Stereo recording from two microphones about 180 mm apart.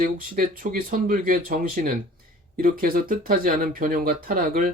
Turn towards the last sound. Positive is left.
turn(degrees=-55)  # may be behind; listen again after turning